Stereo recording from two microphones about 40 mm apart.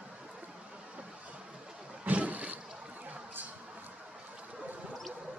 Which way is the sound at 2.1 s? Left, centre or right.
Right.